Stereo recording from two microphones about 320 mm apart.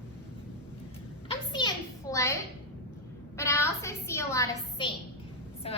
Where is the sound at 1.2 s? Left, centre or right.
Centre.